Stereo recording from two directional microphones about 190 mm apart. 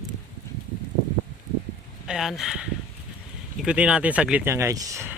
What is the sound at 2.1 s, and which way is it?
Speech, centre (ahead or behind).